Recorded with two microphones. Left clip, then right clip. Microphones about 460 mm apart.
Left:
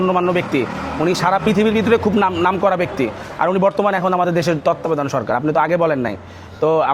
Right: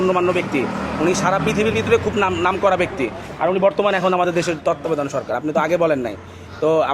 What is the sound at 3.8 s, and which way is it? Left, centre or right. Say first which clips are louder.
A man's voice: left 1 dB; left.